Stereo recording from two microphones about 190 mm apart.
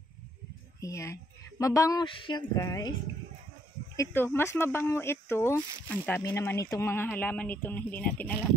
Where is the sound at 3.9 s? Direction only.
10° left (ahead or behind).